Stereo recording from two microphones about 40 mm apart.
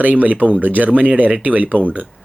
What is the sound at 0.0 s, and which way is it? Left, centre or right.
A man's voice, right.